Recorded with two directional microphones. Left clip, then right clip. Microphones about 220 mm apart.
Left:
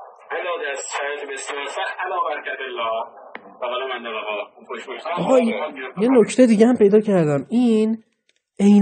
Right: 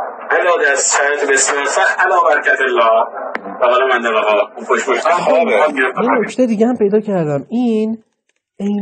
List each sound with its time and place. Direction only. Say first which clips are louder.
0.0 s a man's voice: right 13 dB; 45° right (ahead or behind)
6.2 s a woman's voice: even; 15° left (ahead or behind); by 7.9 s centre (ahead or behind)